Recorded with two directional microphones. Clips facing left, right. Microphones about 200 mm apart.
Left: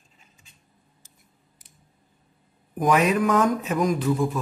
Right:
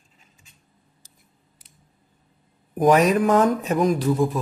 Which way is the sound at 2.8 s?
40° right (ahead or behind).